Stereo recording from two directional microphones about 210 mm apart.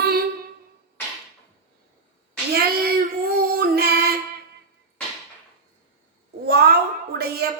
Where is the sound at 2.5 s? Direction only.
45° right (ahead or behind).